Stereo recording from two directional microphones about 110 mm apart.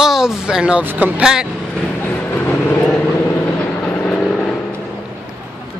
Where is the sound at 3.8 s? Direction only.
15° left (ahead or behind).